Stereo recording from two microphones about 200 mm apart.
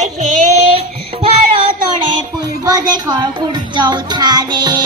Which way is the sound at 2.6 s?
20° right (ahead or behind).